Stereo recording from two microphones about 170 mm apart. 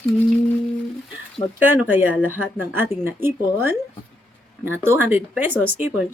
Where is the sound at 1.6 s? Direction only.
10° right (ahead or behind).